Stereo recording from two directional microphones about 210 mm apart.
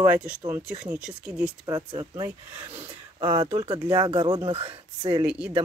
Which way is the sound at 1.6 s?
20° right (ahead or behind).